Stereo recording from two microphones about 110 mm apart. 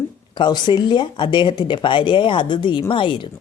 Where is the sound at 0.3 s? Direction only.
45° left (ahead or behind).